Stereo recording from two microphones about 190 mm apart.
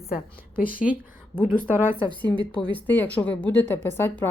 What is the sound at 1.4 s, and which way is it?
Speech, 10° right (ahead or behind).